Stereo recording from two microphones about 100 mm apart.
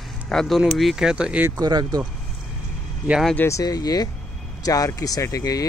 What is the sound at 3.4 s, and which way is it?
Speech, 30° left (ahead or behind).